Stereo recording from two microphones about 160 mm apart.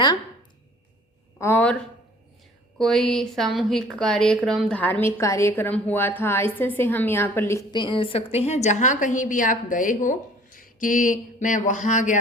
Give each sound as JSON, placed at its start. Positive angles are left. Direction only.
{"t": 1.4, "sound": "a woman's voice", "side_deg": 15}
{"t": 2.7, "sound": "a woman's voice", "side_deg": 5}
{"t": 7.7, "sound": "a woman's voice", "side_deg": 30}